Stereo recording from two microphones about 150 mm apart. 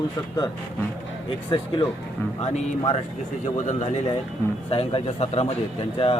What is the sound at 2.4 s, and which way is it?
Speech, 45° left (ahead or behind).